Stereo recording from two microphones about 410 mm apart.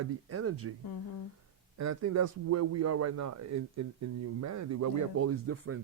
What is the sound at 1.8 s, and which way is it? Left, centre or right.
A man's voice, right.